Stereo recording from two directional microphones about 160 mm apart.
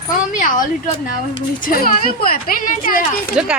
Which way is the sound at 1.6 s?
65° left (ahead or behind).